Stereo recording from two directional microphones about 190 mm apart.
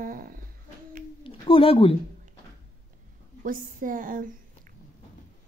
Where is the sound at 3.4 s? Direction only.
45° right (ahead or behind).